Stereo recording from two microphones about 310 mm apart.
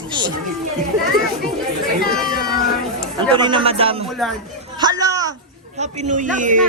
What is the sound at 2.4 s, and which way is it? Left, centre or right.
Speech, left.